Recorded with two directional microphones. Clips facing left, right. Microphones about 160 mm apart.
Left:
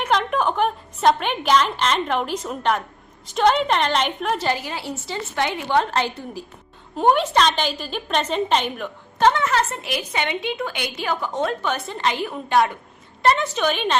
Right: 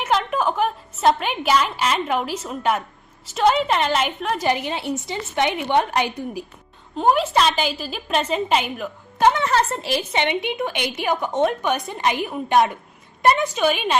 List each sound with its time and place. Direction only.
0.0 s a woman's voice: 5° right (ahead or behind)
4.4 s a woman's voice: 20° right (ahead or behind)
6.9 s a woman's voice: centre (ahead or behind)
9.4 s a woman's voice: 35° right (ahead or behind); by 13.9 s 10° right (ahead or behind)